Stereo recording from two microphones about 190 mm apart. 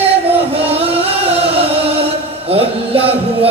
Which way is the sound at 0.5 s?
30° right (ahead or behind).